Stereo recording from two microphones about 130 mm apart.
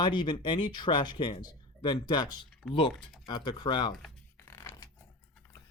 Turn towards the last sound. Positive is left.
turn(degrees=25)  # may be behind; listen again after turning